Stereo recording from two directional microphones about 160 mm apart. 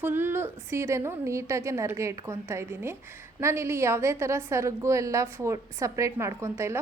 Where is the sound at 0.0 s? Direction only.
15° right (ahead or behind).